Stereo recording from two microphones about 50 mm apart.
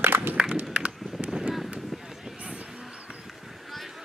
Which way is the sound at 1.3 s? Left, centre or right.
Centre.